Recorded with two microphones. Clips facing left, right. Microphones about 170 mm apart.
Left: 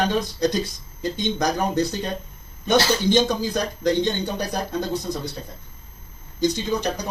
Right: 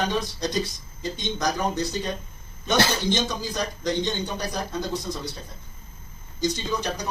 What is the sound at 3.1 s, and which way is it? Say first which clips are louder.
A man's voice: left 7 dB; 60° left (ahead or behind).